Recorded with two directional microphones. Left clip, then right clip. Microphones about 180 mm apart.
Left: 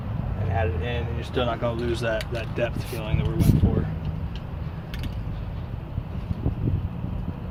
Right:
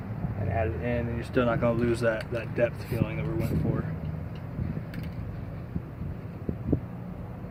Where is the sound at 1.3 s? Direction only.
60° right (ahead or behind); by 2.2 s 45° right (ahead or behind).